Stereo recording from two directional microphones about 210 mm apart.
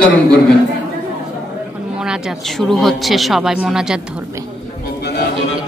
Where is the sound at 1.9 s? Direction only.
5° right (ahead or behind).